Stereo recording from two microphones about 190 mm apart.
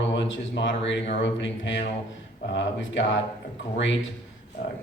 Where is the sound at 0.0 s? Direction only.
70° left (ahead or behind).